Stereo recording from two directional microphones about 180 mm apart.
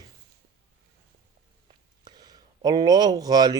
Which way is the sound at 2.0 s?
20° right (ahead or behind).